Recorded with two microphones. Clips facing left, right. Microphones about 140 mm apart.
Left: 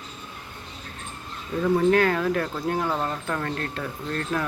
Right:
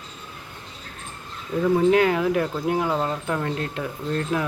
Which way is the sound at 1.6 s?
15° right (ahead or behind).